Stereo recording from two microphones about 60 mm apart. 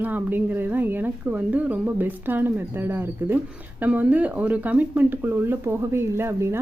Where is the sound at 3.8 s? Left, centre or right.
Right.